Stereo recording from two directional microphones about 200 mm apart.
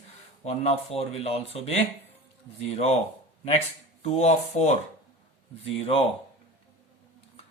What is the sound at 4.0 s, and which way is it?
Speech, 35° left (ahead or behind).